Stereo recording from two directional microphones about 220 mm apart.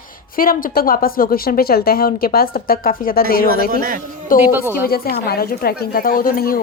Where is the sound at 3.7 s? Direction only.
40° right (ahead or behind).